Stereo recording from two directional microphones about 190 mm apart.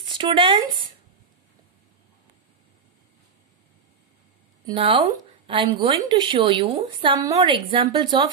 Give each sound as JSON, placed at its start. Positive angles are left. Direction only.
{"t": 0.0, "sound": "speech", "side_deg": -25}
{"t": 4.6, "sound": "a woman's voice", "side_deg": -25}